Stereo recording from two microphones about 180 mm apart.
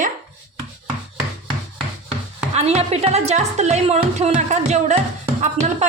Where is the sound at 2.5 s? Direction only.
35° right (ahead or behind).